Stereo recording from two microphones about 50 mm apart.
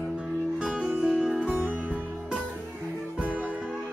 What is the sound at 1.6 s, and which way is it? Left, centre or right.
Music, right.